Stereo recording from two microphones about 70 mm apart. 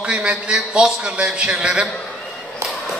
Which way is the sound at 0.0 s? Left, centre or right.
Centre.